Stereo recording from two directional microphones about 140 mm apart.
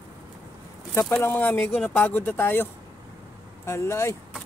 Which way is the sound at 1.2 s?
15° left (ahead or behind).